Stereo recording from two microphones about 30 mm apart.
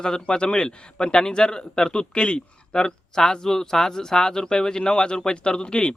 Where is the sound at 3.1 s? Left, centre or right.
Left.